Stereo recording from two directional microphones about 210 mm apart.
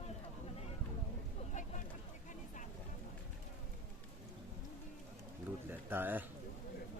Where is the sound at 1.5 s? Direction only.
35° left (ahead or behind).